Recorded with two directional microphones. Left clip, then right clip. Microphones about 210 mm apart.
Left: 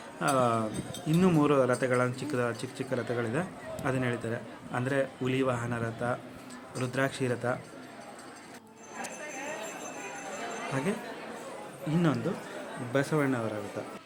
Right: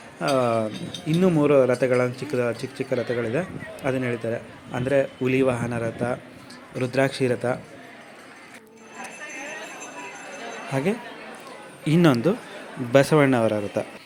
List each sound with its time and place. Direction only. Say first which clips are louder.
0.2 s speech: right 5 dB; 15° right (ahead or behind)
11.9 s speech: right 11 dB; 35° right (ahead or behind)